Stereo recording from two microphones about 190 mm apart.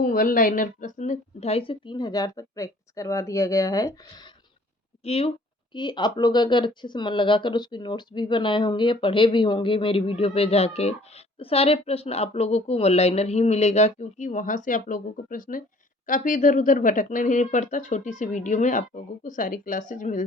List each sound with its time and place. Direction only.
0.0 s speech: 45° left (ahead or behind); by 4.2 s 20° left (ahead or behind)
5.0 s a woman's voice: 30° left (ahead or behind)